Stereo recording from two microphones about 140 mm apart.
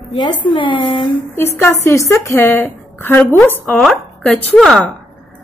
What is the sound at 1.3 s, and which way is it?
A woman's voice, 20° left (ahead or behind).